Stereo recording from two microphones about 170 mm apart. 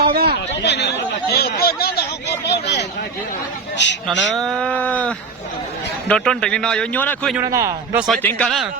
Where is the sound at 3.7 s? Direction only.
90° left.